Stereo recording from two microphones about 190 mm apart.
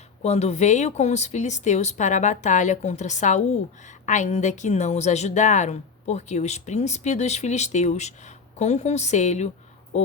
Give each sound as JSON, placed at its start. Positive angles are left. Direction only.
{"t": 0.2, "sound": "a woman's voice", "side_deg": 35}